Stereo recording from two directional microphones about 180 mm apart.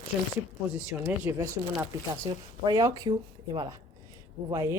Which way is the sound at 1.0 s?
15° right (ahead or behind).